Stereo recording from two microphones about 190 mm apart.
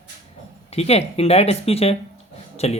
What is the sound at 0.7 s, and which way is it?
Speech, 35° left (ahead or behind).